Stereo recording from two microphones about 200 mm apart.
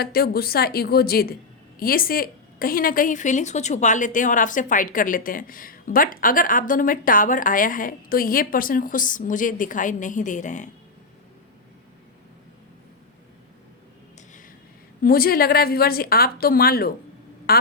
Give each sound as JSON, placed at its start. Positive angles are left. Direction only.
{"t": 0.0, "sound": "a woman's voice", "side_deg": 50}
{"t": 15.0, "sound": "a woman's voice", "side_deg": 50}